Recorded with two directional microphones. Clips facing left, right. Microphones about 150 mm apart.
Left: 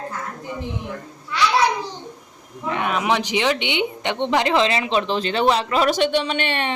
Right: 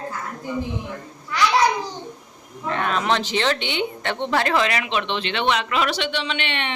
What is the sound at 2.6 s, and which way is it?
A woman's voice, 15° left (ahead or behind).